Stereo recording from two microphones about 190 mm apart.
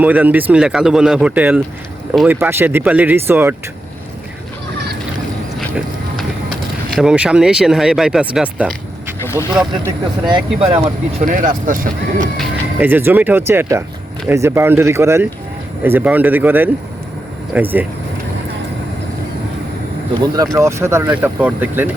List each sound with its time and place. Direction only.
0.0 s speech: 10° right (ahead or behind)
5.5 s horse: centre (ahead or behind)
6.9 s speech: 5° right (ahead or behind)
9.8 s speech: 25° right (ahead or behind)
11.2 s speech: 45° right (ahead or behind)
12.8 s speech: 10° right (ahead or behind)
20.3 s speech: 20° right (ahead or behind)